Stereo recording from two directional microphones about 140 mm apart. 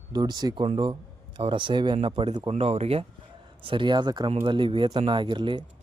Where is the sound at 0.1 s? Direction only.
30° right (ahead or behind).